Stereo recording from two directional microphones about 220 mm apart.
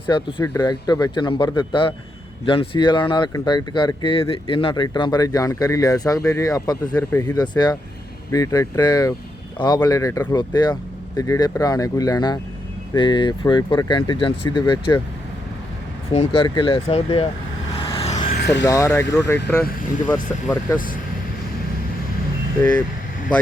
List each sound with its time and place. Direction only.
0.0 s speech: 25° left (ahead or behind)
16.1 s speech: 25° left (ahead or behind)
17.8 s vehicle: 25° left (ahead or behind)
18.3 s a sound: 50° left (ahead or behind)
18.6 s speech: 15° left (ahead or behind)
20.5 s speech: 15° left (ahead or behind)